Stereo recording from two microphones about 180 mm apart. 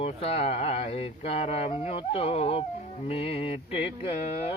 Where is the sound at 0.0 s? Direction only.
35° left (ahead or behind).